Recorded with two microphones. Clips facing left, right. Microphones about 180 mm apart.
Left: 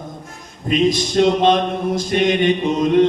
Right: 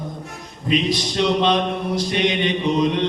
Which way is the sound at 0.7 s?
50° left (ahead or behind).